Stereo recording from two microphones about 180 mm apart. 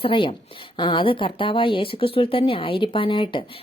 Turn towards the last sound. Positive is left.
turn(degrees=30)  # may be behind; listen again after turning